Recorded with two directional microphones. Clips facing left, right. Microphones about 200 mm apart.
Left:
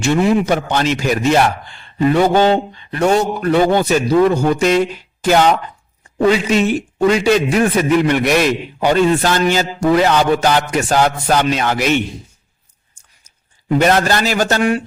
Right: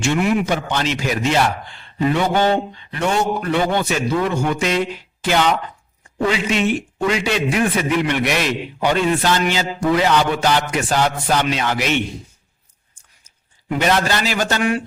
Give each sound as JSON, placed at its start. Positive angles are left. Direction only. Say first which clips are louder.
{"t": 0.0, "sound": "a man's voice", "louder": "left 4 dB", "side_deg": 35}
{"t": 0.5, "sound": "a man's voice", "louder": "left 4 dB", "side_deg": 45}
{"t": 13.8, "sound": "a man's voice", "louder": "left 3 dB", "side_deg": 50}